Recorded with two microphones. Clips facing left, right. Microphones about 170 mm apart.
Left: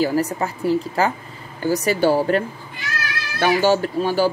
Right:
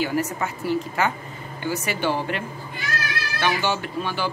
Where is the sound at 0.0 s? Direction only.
35° left (ahead or behind).